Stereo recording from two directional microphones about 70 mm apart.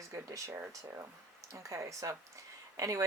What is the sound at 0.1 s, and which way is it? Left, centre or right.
Speech, right.